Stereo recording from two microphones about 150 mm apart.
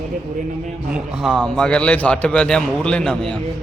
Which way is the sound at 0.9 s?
5° right (ahead or behind).